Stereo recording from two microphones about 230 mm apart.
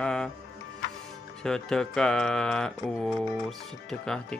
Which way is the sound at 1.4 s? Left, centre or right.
Centre.